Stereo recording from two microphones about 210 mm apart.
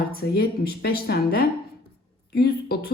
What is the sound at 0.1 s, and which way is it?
A woman's voice, 45° left (ahead or behind).